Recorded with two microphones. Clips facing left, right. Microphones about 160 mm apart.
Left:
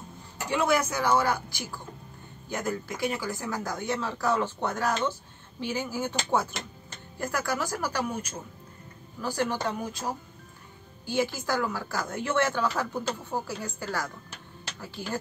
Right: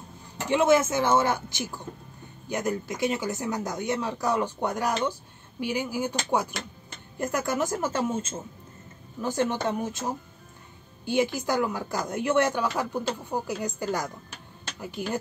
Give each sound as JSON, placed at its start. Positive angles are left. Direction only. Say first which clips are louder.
{"t": 0.5, "sound": "speech", "louder": "right 5 dB", "side_deg": -20}